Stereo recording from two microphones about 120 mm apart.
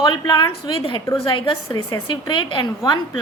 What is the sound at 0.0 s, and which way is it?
A woman's voice, 45° left (ahead or behind).